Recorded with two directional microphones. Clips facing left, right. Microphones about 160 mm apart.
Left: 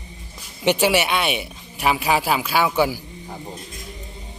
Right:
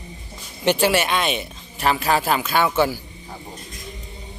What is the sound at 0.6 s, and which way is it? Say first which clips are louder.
Speech: even; 15° left (ahead or behind).